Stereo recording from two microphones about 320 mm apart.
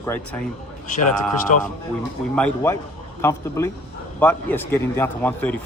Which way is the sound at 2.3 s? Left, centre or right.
Centre.